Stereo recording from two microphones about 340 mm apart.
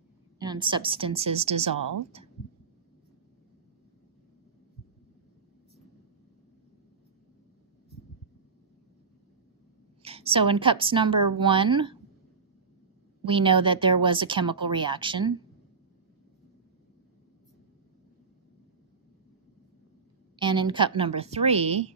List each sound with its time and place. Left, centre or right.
0.4 s speech: centre
10.0 s speech: centre
13.2 s speech: centre
20.3 s speech: centre